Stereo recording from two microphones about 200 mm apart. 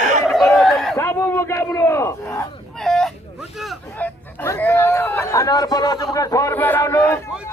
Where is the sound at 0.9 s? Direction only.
10° left (ahead or behind).